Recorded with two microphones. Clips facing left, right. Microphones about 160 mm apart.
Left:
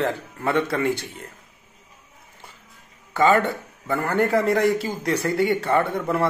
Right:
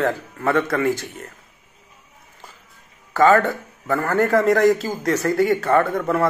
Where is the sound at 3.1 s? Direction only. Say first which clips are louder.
Right 3 dB; 20° left (ahead or behind).